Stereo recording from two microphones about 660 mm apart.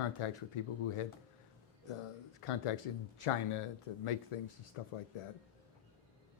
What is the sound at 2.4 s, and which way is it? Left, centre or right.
Speech, left.